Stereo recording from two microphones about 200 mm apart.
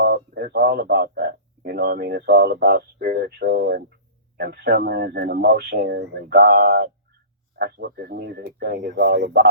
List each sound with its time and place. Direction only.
0.0 s speech: 55° right (ahead or behind)